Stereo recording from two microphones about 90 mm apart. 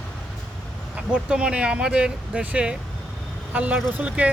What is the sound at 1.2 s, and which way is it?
Speech, 10° right (ahead or behind).